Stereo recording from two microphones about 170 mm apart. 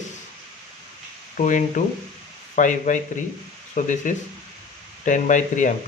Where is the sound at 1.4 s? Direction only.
50° left (ahead or behind).